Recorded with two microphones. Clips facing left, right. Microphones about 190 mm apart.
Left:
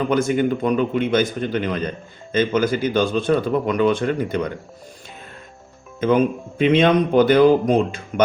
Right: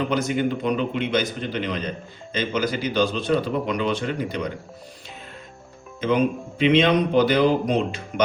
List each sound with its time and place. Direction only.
0.1 s speech: 50° left (ahead or behind)
6.0 s speech: 50° left (ahead or behind)